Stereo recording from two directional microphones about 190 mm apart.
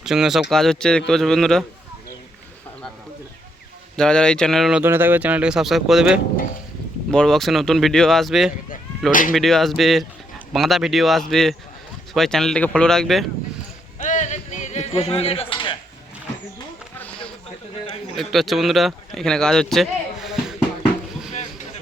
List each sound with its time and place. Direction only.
0.0 s speech: centre (ahead or behind)
3.9 s speech: 5° left (ahead or behind)
4.8 s speech: 10° right (ahead or behind)
14.0 s a sound: 40° left (ahead or behind)
17.0 s a sound: 5° left (ahead or behind)
18.1 s speech: centre (ahead or behind)